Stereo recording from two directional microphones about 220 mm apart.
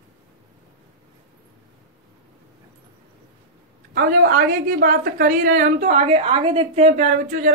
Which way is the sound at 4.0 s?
40° right (ahead or behind).